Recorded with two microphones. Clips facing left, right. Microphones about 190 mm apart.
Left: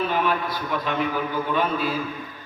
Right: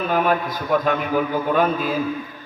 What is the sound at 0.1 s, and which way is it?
A man's voice, 50° right (ahead or behind).